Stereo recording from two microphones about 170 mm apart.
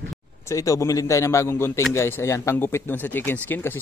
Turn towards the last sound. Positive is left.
turn(degrees=10)  # may be behind; listen again after turning